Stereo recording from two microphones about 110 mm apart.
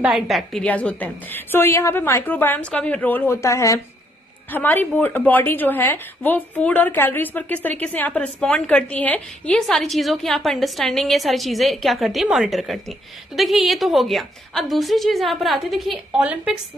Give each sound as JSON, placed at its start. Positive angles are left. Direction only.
{"t": 0.0, "sound": "a woman's voice", "side_deg": 0}
{"t": 0.7, "sound": "a woman's voice", "side_deg": 15}
{"t": 4.5, "sound": "a woman's voice", "side_deg": 15}
{"t": 9.6, "sound": "a woman's voice", "side_deg": 0}
{"t": 16.1, "sound": "a woman's voice", "side_deg": -10}